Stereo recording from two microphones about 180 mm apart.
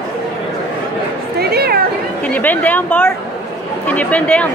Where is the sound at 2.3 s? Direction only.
10° left (ahead or behind).